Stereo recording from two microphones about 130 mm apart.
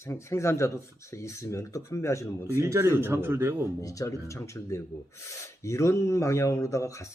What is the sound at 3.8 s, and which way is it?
Speech, 25° left (ahead or behind).